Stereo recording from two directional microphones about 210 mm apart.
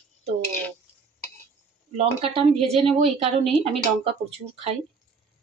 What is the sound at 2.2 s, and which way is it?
A woman's voice, 25° right (ahead or behind).